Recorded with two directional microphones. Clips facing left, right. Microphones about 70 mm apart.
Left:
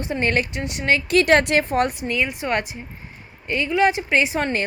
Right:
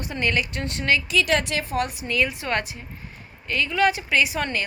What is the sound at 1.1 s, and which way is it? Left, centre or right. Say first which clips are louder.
Speech: left 6 dB; left.